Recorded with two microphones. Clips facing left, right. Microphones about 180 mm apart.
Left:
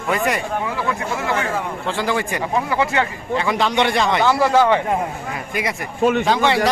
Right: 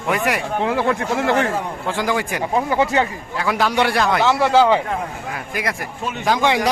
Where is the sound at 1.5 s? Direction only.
10° right (ahead or behind).